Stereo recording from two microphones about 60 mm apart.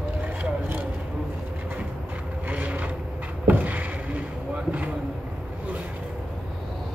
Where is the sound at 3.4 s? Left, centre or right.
Right.